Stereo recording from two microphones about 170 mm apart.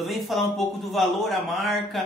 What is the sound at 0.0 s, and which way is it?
Speech, centre (ahead or behind).